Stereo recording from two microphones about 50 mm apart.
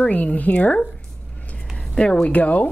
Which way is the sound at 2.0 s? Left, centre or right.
Left.